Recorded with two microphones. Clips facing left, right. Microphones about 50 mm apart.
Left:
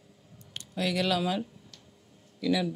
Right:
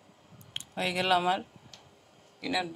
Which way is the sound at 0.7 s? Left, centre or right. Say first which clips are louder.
Right 1 dB; right.